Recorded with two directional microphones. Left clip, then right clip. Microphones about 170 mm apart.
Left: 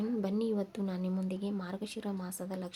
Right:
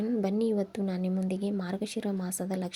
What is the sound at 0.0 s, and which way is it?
A woman's voice, 20° right (ahead or behind).